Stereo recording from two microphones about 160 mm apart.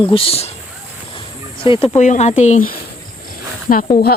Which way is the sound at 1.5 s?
30° left (ahead or behind).